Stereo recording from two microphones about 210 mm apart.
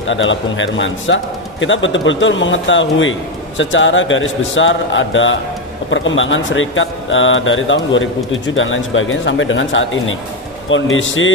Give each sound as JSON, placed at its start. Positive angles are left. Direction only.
{"t": 0.1, "sound": "a man's voice", "side_deg": 65}